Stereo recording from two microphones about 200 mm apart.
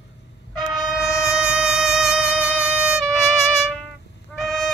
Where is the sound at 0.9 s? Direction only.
Centre (ahead or behind).